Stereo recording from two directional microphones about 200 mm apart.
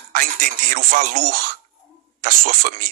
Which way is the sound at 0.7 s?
45° right (ahead or behind).